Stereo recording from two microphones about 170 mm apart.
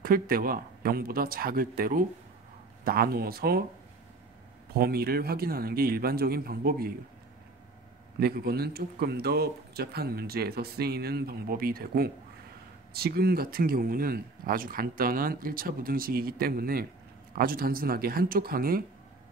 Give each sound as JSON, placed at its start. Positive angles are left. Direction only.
{"t": 0.0, "sound": "speech", "side_deg": -60}
{"t": 4.7, "sound": "speech", "side_deg": -65}
{"t": 8.2, "sound": "speech", "side_deg": -65}